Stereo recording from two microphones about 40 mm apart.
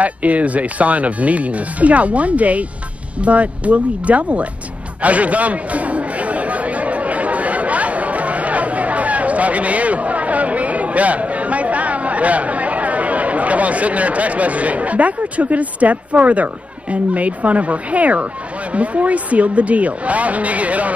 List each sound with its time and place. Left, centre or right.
0.0 s speech: right
5.0 s chatter: right
16.9 s speech: right